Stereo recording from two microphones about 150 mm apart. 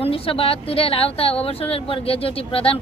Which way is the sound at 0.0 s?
40° left (ahead or behind).